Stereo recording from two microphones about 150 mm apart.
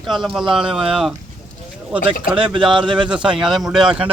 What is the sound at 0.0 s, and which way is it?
Speech, centre (ahead or behind).